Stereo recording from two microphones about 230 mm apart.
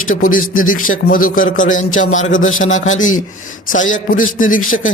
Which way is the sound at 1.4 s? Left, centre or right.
Left.